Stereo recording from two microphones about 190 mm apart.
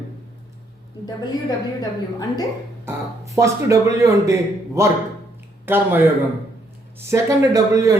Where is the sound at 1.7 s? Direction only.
20° left (ahead or behind).